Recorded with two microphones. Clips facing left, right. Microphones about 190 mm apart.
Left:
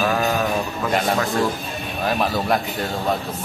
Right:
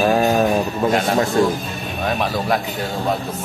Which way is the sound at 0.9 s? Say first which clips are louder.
Right 1 dB; centre (ahead or behind).